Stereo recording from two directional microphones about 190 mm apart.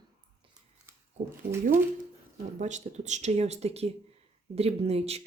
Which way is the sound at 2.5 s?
40° right (ahead or behind).